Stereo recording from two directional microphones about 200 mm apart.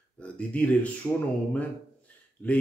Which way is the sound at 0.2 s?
5° left (ahead or behind).